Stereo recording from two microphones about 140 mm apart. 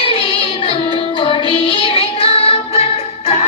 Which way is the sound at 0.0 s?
40° left (ahead or behind).